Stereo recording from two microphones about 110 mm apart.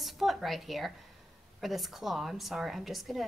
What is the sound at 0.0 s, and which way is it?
A woman's voice, centre (ahead or behind).